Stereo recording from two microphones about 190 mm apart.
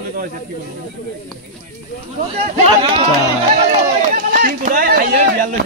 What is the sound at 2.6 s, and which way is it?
Speech, 30° right (ahead or behind).